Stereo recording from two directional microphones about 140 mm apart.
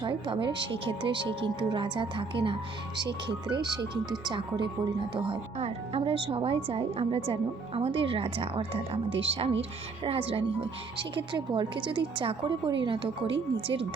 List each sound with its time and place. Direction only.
0.0 s a woman's voice: 35° right (ahead or behind)